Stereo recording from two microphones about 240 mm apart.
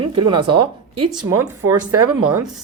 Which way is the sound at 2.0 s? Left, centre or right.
Right.